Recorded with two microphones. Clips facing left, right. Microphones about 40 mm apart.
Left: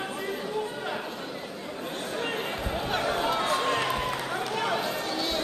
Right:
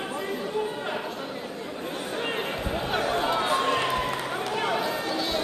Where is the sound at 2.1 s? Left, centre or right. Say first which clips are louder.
Right 1 dB; right.